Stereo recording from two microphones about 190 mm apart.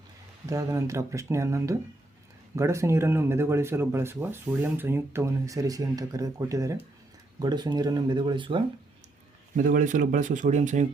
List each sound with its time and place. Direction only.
0.4 s speech: 15° right (ahead or behind)
9.6 s speech: 45° right (ahead or behind)